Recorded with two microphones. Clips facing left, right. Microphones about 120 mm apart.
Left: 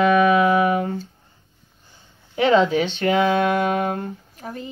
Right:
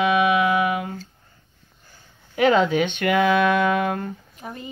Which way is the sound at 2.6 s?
35° left (ahead or behind).